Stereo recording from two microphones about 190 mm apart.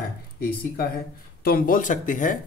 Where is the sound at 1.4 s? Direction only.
50° left (ahead or behind).